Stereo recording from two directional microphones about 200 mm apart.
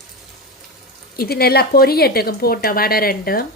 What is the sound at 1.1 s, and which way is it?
Speech, 50° left (ahead or behind).